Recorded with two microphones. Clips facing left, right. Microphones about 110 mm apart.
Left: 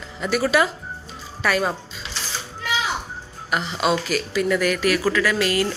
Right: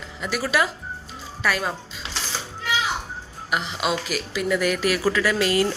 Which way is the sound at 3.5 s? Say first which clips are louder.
Left 3 dB; 10° right (ahead or behind).